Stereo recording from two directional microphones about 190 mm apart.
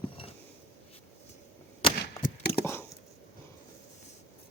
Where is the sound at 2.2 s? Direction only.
55° left (ahead or behind).